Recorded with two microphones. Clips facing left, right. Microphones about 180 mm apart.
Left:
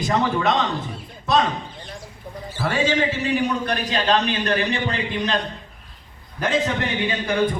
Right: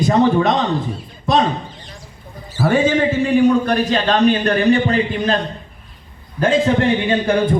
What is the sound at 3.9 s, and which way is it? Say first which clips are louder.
A man's voice: right 5 dB; 35° right (ahead or behind).